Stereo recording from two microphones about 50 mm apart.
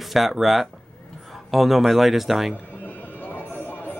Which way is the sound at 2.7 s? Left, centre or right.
Left.